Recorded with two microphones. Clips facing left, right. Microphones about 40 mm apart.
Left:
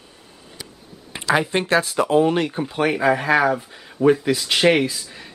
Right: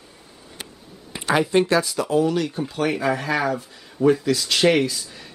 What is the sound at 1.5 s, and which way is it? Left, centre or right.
Speech, left.